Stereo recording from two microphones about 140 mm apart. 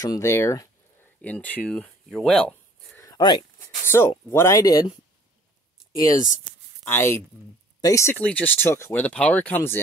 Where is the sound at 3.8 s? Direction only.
15° left (ahead or behind).